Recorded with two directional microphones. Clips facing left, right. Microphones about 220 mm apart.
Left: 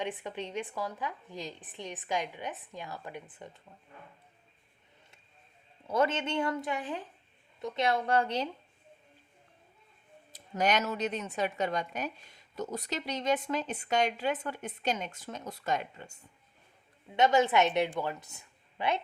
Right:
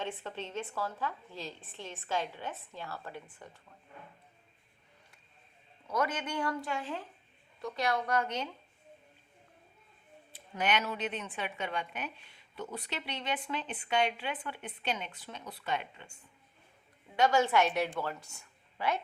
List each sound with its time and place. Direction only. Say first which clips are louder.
0.0 s a woman's voice: left 3 dB; 15° left (ahead or behind)
5.9 s a woman's voice: left 4 dB; 25° left (ahead or behind)
10.3 s a woman's voice: left 3 dB; 40° left (ahead or behind)
17.2 s a woman's voice: left 2 dB; 20° left (ahead or behind)